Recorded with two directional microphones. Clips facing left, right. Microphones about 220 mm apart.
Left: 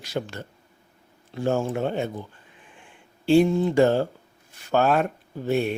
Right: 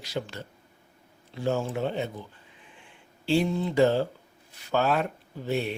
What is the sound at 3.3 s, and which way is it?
Speech, 50° left (ahead or behind).